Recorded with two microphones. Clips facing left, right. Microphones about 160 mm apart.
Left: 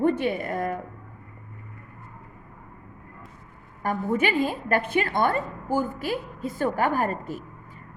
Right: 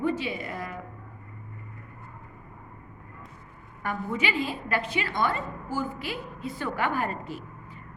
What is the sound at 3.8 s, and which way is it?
A woman's voice, 45° left (ahead or behind).